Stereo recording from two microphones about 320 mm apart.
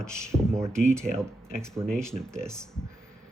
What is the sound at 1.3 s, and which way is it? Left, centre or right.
Speech, centre.